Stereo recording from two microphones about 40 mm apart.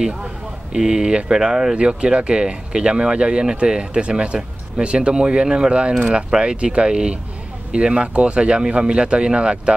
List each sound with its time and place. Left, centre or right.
0.7 s speech: centre